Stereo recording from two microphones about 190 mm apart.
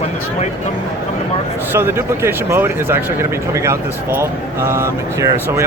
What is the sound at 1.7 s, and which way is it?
Speech, 10° right (ahead or behind).